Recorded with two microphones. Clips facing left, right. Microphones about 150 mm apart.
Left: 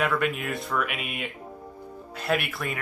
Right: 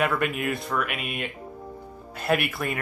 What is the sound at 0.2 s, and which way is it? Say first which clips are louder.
Speech: right 1 dB; 5° right (ahead or behind).